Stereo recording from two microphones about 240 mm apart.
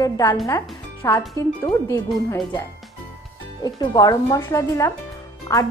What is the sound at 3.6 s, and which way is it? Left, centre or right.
Music, centre.